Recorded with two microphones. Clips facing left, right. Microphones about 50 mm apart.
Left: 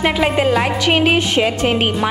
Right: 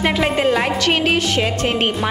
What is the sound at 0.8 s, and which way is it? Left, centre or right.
A woman's voice, centre.